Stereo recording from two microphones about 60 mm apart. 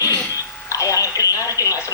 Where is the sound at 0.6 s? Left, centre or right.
Left.